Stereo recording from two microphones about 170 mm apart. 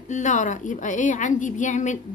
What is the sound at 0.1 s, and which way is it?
A woman's voice, 45° left (ahead or behind).